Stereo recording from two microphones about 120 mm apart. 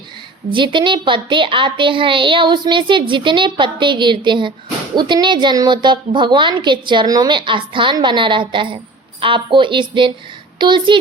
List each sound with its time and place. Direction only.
0.5 s a woman's voice: 40° right (ahead or behind)